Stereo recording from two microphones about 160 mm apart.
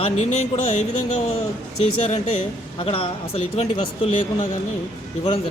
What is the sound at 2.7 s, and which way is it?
Speech, 35° left (ahead or behind).